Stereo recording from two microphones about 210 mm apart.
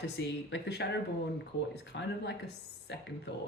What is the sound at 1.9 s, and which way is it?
Speech, 55° left (ahead or behind).